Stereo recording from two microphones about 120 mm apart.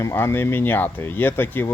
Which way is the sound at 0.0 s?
20° left (ahead or behind).